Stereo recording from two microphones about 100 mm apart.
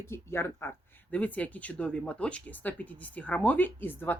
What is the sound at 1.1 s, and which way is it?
Speech, 15° left (ahead or behind).